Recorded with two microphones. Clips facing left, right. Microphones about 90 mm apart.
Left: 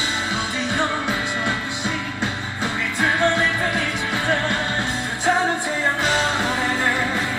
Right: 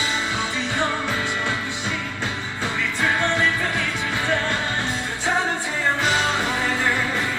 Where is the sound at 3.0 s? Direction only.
20° left (ahead or behind).